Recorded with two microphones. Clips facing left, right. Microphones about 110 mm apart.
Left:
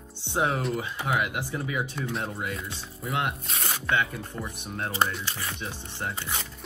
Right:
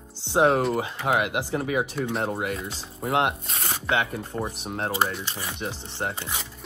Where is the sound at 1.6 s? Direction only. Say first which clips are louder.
Right 5 dB; 50° right (ahead or behind).